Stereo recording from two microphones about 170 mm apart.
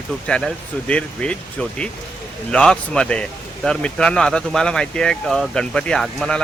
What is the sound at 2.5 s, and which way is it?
Speech, 5° left (ahead or behind).